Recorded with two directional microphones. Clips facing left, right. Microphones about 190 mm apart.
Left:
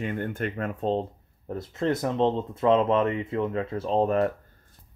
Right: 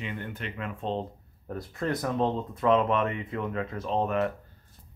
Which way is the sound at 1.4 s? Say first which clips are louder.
Left 4 dB; 25° left (ahead or behind).